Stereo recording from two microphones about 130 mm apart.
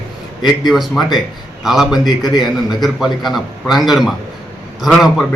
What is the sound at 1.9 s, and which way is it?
Speech, 30° left (ahead or behind).